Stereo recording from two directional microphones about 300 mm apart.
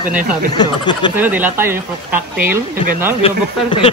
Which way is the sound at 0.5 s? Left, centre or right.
Centre.